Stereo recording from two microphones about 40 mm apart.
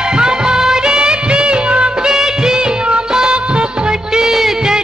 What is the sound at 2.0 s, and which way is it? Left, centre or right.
Music of bollywood, centre.